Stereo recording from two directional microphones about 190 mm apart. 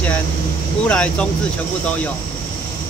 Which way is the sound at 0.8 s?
5° left (ahead or behind).